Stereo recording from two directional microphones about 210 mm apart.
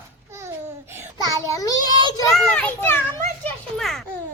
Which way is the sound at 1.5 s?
15° left (ahead or behind).